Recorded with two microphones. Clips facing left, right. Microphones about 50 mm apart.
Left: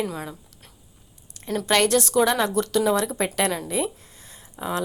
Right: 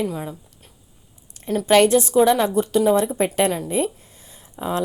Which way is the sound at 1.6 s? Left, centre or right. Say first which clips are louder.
Right 6 dB; right.